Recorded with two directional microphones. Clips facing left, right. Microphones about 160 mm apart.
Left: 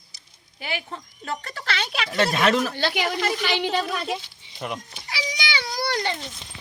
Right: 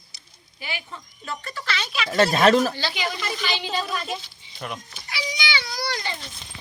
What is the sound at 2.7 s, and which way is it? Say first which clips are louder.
A woman's voice: left 4 dB; 60° left (ahead or behind).